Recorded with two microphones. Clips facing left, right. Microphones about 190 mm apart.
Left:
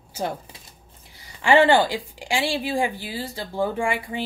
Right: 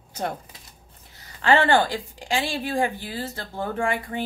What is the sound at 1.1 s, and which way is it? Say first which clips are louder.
Speech: left 3 dB; 10° left (ahead or behind).